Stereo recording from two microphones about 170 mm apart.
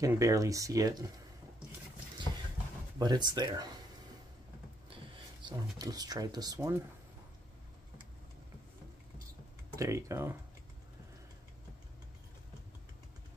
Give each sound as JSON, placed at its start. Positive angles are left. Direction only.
{"t": 0.0, "sound": "speech", "side_deg": -20}
{"t": 3.0, "sound": "speech", "side_deg": -25}
{"t": 5.4, "sound": "speech", "side_deg": -25}
{"t": 9.8, "sound": "speech", "side_deg": -15}